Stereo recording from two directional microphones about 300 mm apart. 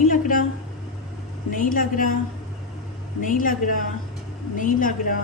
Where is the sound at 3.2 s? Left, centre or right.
Left.